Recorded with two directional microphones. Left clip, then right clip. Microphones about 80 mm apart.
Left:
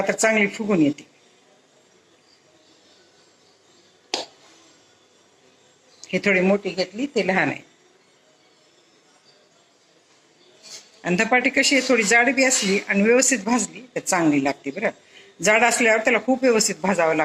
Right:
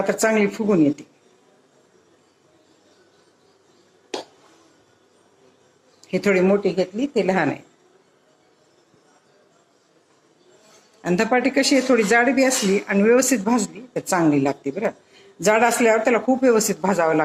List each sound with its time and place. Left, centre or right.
0.0 s speech: right
4.1 s a sound: right
6.0 s speech: right
11.0 s speech: right